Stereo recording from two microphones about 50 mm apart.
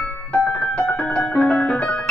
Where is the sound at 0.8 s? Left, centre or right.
Left.